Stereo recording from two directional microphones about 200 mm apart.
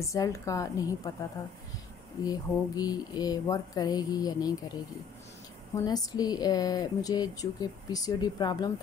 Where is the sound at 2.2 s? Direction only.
20° left (ahead or behind).